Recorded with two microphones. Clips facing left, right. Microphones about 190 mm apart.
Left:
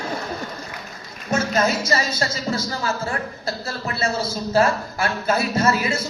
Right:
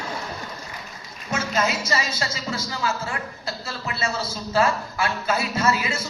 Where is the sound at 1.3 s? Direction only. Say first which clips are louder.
Left 4 dB; 40° left (ahead or behind).